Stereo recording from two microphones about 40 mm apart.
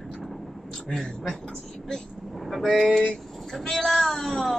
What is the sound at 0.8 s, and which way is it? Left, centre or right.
Speech, left.